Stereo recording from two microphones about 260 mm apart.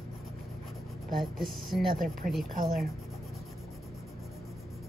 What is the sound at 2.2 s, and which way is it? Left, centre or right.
Speech, right.